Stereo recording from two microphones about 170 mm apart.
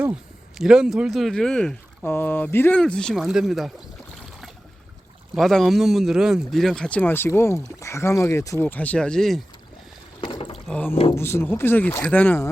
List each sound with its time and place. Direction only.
0.6 s speech: 5° right (ahead or behind)
5.3 s speech: centre (ahead or behind)
10.2 s boat: 30° left (ahead or behind)
10.7 s speech: 10° left (ahead or behind)